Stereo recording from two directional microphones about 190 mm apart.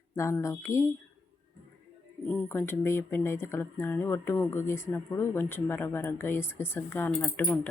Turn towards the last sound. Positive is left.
turn(degrees=10)  # may be behind; listen again after turning